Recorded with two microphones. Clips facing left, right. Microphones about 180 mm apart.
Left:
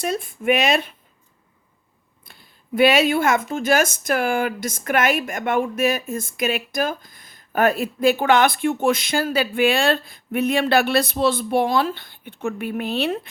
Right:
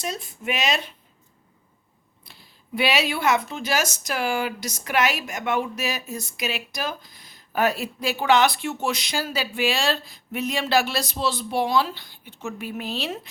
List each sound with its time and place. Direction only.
0.0 s speech: 55° left (ahead or behind)
2.2 s a sound: 50° left (ahead or behind)
3.5 s speech: 50° left (ahead or behind)